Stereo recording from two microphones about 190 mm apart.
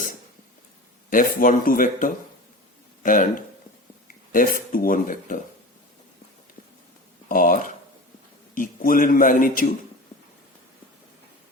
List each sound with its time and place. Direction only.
1.1 s a man's voice: 45° left (ahead or behind)
4.3 s a man's voice: 45° left (ahead or behind)
7.3 s a man's voice: 45° left (ahead or behind)